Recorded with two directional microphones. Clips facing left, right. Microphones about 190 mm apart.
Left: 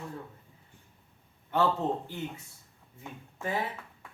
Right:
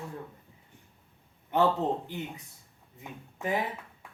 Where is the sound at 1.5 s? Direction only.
20° right (ahead or behind).